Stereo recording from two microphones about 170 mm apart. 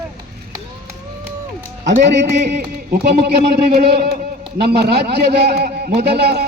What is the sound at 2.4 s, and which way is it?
Speech, 75° right (ahead or behind).